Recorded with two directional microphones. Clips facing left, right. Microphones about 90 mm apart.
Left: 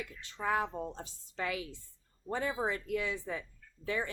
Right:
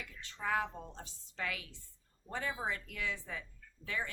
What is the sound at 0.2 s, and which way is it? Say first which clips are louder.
Speech: left 2 dB; 20° left (ahead or behind).